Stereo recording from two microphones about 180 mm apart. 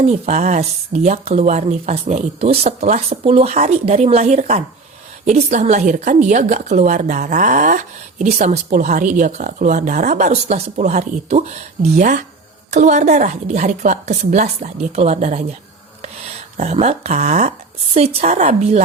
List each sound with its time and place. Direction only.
0.0 s speech: 40° right (ahead or behind)
16.6 s speech: 35° right (ahead or behind)